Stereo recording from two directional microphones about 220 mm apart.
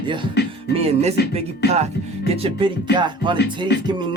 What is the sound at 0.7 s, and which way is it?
Music, 30° right (ahead or behind).